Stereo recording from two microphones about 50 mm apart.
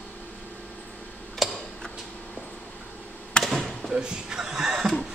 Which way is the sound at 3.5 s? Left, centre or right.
Centre.